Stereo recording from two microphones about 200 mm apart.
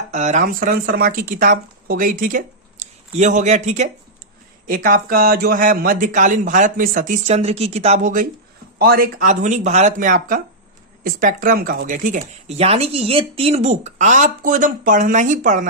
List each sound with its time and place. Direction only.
0.1 s speech: 35° right (ahead or behind)